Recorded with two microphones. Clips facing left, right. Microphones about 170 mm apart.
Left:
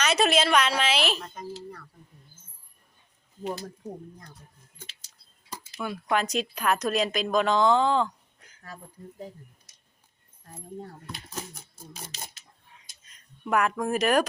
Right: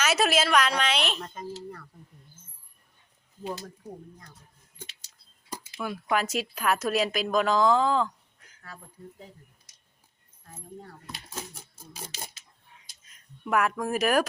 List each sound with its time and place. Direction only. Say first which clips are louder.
0.0 s speech: left 1 dB; 5° right (ahead or behind)
5.8 s speech: left 1 dB; 5° right (ahead or behind)
8.6 s speech: left 2 dB; 40° left (ahead or behind)
13.1 s speech: left 1 dB; centre (ahead or behind)